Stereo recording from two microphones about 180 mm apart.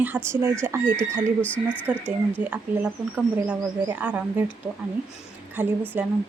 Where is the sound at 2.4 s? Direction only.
10° right (ahead or behind).